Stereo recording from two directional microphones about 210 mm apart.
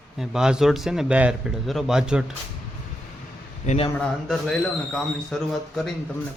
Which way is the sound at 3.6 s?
25° left (ahead or behind).